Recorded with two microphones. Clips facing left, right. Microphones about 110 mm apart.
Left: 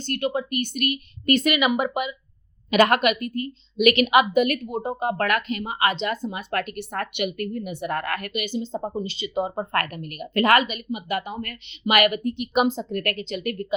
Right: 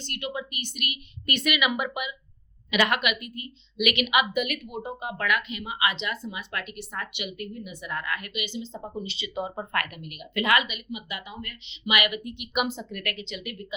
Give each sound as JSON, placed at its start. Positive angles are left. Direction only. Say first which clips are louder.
{"t": 0.0, "sound": "a woman's voice", "louder": "left 8 dB", "side_deg": 45}